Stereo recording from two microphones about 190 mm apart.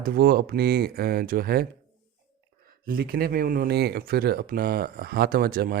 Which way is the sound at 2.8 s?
50° right (ahead or behind).